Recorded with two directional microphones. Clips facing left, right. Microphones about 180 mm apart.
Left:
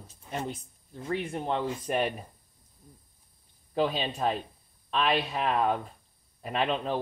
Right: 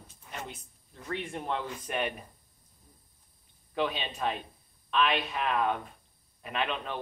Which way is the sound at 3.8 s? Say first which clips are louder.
Left 4 dB; 35° left (ahead or behind).